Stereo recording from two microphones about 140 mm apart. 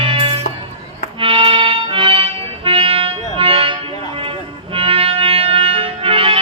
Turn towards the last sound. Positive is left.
turn(degrees=-40)  # may be behind; listen again after turning